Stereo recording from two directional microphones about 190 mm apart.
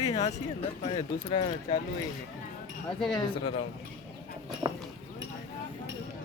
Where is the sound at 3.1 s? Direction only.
25° left (ahead or behind).